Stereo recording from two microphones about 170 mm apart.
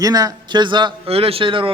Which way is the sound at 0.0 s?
20° right (ahead or behind).